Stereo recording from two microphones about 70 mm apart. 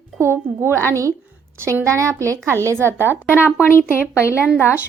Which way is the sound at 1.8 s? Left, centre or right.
Right.